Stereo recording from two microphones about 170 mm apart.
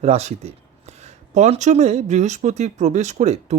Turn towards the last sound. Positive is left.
turn(degrees=-45)  # may be behind; listen again after turning